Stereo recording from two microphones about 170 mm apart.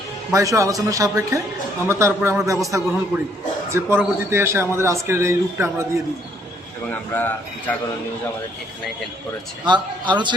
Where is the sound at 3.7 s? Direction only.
15° right (ahead or behind).